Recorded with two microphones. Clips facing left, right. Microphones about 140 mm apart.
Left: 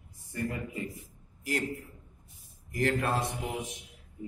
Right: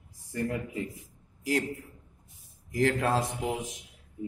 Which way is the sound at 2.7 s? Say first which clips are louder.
Right 3 dB; 90° right.